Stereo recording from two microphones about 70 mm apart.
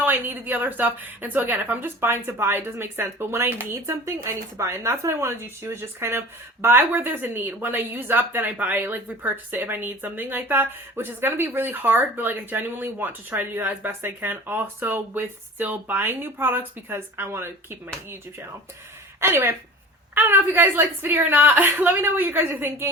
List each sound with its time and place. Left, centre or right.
0.0 s a woman's voice: right
19.2 s a woman's voice: right